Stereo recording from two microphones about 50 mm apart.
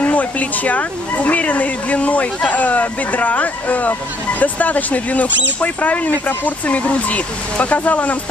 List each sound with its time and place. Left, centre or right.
0.0 s speech: left